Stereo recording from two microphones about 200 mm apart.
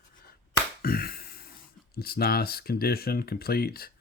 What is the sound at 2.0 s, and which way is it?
Speech, 50° left (ahead or behind).